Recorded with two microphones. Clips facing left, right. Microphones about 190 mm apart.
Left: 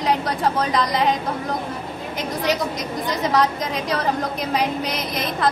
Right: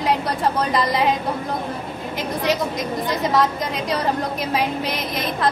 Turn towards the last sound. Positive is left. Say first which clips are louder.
# even
turn(degrees=0)  # may be behind; listen again after turning